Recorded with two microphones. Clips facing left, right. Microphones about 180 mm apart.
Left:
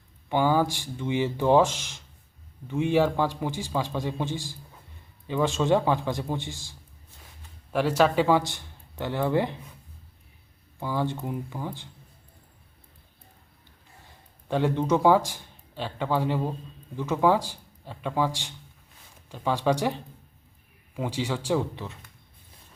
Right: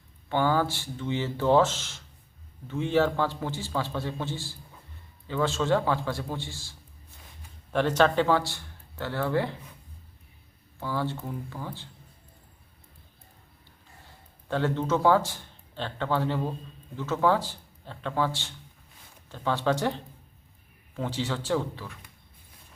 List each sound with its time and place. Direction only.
0.3 s a man's voice: 15° left (ahead or behind)
10.8 s a man's voice: 15° left (ahead or behind)
14.4 s a man's voice: 15° left (ahead or behind)